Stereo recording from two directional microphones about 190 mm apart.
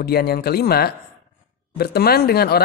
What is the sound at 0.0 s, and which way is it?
Speech, 55° left (ahead or behind).